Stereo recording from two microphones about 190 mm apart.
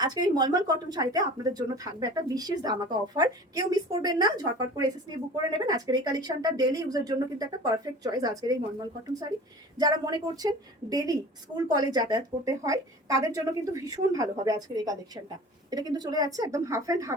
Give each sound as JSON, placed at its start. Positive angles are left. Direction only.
{"t": 0.0, "sound": "a woman's voice", "side_deg": -20}
{"t": 9.7, "sound": "a woman's voice", "side_deg": -20}